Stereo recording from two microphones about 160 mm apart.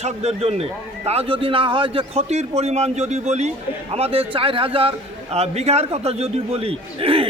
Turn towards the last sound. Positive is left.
turn(degrees=-35)  # may be behind; listen again after turning